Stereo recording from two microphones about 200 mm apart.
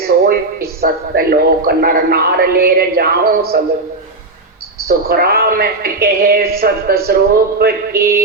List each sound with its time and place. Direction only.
0.3 s a man's voice: 50° right (ahead or behind)
4.9 s a man's voice: 50° right (ahead or behind)